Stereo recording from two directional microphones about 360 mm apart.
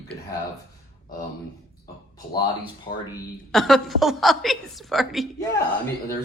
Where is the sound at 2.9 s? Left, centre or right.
Centre.